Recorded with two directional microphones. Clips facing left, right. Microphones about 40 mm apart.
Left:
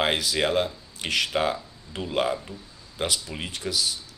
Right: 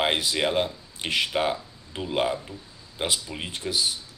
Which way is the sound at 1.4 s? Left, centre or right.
Centre.